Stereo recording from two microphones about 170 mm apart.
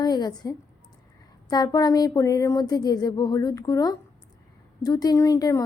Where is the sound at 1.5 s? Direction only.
25° left (ahead or behind).